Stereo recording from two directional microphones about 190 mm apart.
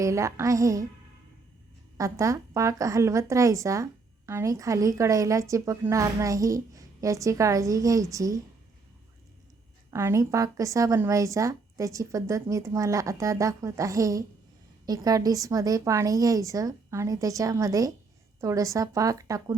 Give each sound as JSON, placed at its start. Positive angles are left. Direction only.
{"t": 0.0, "sound": "speech", "side_deg": -15}
{"t": 2.0, "sound": "speech", "side_deg": -15}
{"t": 9.9, "sound": "speech", "side_deg": -15}